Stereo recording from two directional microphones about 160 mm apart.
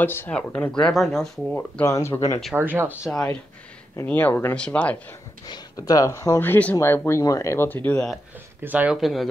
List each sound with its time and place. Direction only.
0.0 s speech: 10° left (ahead or behind)
2.5 s speech: 10° right (ahead or behind)
3.1 s speech: 5° left (ahead or behind)
5.5 s speech: 20° left (ahead or behind)
8.6 s speech: 10° right (ahead or behind)